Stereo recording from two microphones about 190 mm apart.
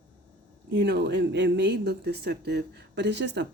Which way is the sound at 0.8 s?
60° right (ahead or behind).